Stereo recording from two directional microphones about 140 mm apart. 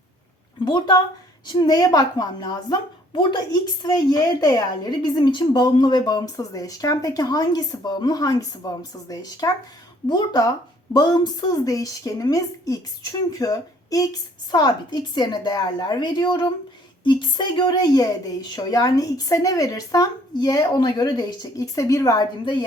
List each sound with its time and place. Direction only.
0.6 s speech: 30° left (ahead or behind)